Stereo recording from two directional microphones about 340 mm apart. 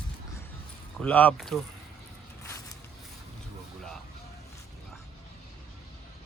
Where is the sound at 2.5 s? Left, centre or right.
Centre.